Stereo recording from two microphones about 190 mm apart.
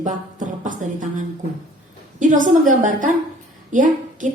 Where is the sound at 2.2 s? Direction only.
40° right (ahead or behind).